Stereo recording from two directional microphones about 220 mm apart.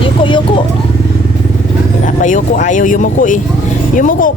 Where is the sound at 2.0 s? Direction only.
35° left (ahead or behind).